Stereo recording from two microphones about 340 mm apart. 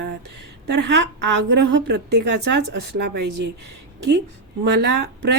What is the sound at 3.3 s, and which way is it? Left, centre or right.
Speech, right.